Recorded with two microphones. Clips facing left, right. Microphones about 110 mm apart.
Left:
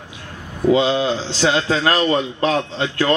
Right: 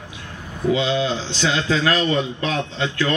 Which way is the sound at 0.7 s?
40° left (ahead or behind).